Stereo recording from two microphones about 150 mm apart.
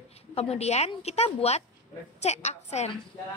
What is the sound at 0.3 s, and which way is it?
A woman's voice, 45° left (ahead or behind).